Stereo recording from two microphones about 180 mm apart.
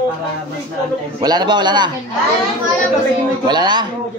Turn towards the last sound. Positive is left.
turn(degrees=-25)  # may be behind; listen again after turning